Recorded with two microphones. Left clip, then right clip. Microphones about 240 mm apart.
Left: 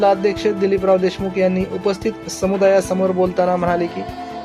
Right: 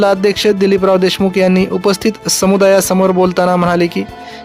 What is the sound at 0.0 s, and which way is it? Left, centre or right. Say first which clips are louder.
Speech: right 4 dB; right.